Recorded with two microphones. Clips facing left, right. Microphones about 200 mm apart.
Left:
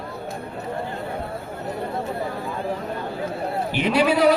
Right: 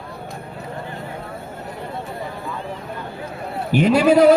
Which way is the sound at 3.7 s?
45° right (ahead or behind).